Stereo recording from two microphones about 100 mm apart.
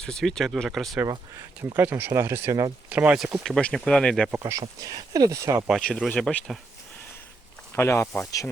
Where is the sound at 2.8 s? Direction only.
15° right (ahead or behind).